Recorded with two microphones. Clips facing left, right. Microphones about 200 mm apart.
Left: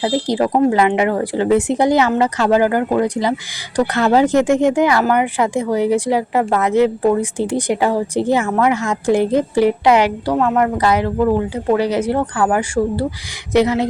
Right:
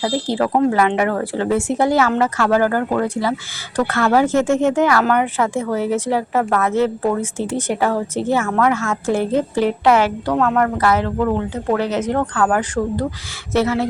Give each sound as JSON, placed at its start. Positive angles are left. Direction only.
{"t": 0.0, "sound": "speech", "side_deg": 15}